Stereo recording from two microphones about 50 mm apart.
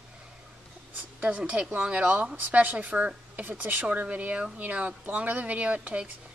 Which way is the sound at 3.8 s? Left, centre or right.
Right.